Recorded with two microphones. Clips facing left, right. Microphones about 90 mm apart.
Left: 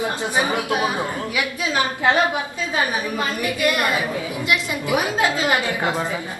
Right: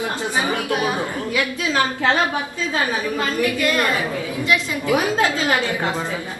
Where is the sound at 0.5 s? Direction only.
20° left (ahead or behind).